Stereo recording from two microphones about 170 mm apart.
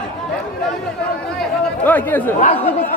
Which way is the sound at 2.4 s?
35° left (ahead or behind).